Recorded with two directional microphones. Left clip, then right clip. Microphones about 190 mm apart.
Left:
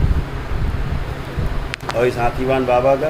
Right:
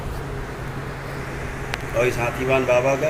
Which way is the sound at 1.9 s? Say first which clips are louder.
Left 4 dB; 50° left (ahead or behind).